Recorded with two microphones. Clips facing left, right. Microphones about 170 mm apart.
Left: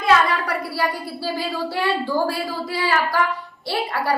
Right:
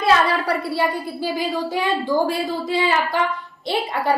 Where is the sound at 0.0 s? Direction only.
30° right (ahead or behind).